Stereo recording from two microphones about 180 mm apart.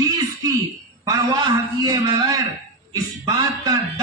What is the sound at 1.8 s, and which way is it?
Speech, 20° right (ahead or behind).